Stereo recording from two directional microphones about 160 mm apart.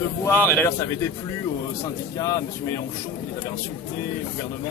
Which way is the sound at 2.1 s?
20° left (ahead or behind).